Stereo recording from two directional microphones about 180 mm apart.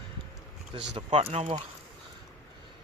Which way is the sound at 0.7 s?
30° right (ahead or behind).